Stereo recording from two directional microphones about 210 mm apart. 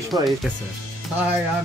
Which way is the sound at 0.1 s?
Centre (ahead or behind).